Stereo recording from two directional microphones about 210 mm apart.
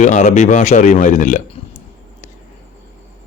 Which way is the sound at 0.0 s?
35° left (ahead or behind).